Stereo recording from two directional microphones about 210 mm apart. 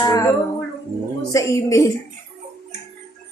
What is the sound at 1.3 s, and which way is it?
Speech, 15° left (ahead or behind).